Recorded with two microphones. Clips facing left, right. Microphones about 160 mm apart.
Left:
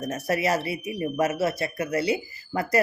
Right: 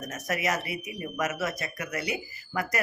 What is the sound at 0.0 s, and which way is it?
Speech, 30° left (ahead or behind).